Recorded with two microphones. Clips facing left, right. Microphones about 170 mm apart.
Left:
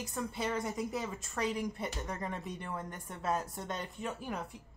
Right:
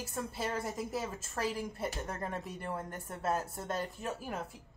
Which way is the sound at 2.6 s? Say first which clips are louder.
Right 2 dB; 40° right (ahead or behind).